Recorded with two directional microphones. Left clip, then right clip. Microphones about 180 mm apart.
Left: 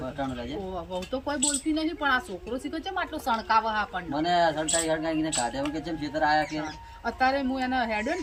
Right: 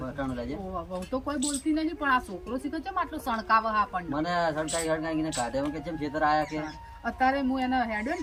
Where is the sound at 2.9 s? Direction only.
25° right (ahead or behind).